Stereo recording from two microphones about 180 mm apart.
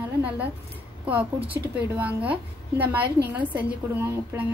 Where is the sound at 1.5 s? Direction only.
10° right (ahead or behind).